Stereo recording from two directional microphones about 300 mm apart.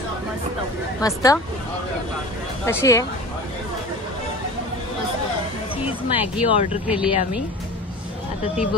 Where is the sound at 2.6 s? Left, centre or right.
Centre.